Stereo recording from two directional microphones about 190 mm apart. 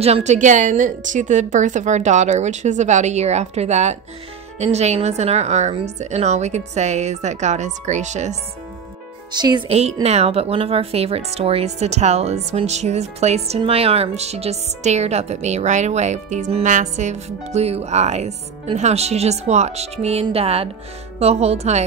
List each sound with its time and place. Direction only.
0.0 s speech: 35° right (ahead or behind)
9.3 s speech: 20° right (ahead or behind)